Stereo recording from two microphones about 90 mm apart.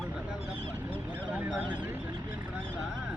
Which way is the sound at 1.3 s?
15° right (ahead or behind).